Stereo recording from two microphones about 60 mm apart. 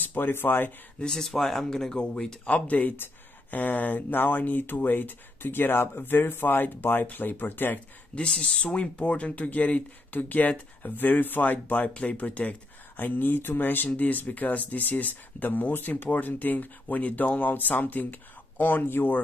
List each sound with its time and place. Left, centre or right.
0.0 s speech: left
0.9 s speech: centre
2.5 s speech: left
8.3 s speech: centre; by 19.2 s left